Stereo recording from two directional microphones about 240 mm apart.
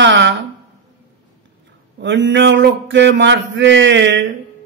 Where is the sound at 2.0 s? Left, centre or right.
Right.